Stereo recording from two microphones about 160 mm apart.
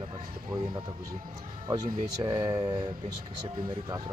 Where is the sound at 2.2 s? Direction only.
25° right (ahead or behind).